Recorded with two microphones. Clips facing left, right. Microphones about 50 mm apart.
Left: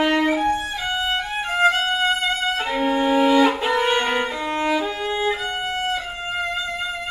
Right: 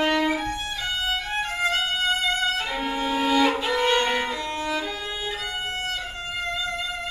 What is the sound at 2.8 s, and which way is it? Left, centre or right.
Music, centre.